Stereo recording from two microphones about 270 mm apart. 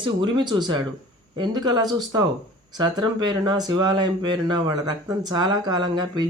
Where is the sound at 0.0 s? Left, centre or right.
Centre.